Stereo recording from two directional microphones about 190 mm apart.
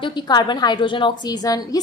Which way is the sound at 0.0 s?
25° left (ahead or behind).